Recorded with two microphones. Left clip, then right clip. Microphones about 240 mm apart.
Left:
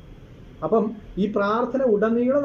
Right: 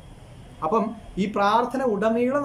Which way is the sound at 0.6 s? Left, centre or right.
Centre.